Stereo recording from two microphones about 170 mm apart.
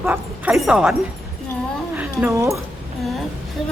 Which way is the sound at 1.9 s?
15° right (ahead or behind).